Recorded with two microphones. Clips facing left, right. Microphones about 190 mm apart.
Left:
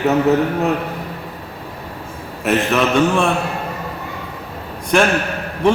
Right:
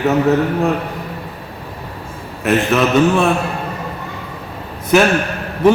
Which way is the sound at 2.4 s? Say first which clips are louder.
Right 2 dB; centre (ahead or behind).